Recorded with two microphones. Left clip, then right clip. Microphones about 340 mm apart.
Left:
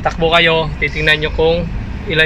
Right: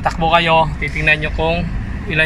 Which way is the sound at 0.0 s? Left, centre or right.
Centre.